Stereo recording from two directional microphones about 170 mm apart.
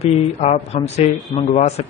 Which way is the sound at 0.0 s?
40° left (ahead or behind).